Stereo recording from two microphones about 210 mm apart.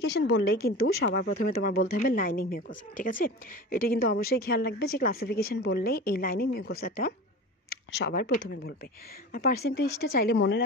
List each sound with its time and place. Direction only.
0.0 s speech: 55° left (ahead or behind)